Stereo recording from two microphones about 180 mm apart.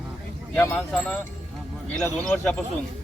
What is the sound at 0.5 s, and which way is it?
Speech, 15° left (ahead or behind).